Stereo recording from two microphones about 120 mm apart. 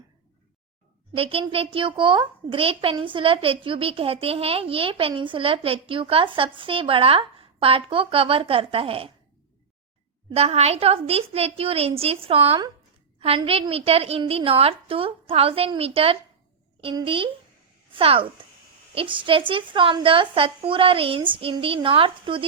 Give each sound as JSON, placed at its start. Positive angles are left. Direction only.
{"t": 1.1, "sound": "a child's voice", "side_deg": -50}
{"t": 10.3, "sound": "a woman's voice", "side_deg": -60}